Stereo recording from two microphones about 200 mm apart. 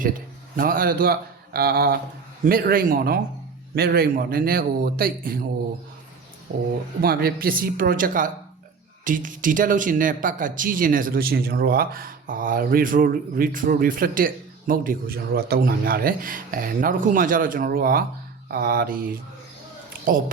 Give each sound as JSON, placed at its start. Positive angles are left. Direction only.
{"t": 0.5, "sound": "speech", "side_deg": -45}
{"t": 7.0, "sound": "speech", "side_deg": -50}